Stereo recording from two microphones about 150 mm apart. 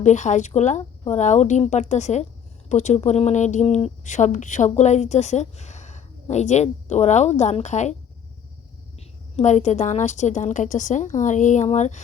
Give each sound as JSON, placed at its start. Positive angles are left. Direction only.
{"t": 0.0, "sound": "speech", "side_deg": 55}
{"t": 9.3, "sound": "speech", "side_deg": 50}